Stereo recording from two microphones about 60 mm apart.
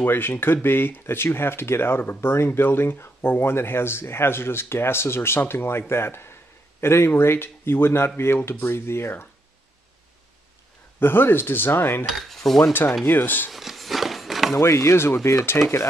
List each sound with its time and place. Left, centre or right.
0.0 s speech: left
11.0 s speech: left
12.1 s cutlery: centre
13.0 s speech: left
13.5 s a sound: centre
14.6 s speech: left